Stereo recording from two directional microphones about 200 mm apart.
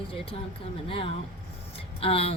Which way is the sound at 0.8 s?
30° left (ahead or behind).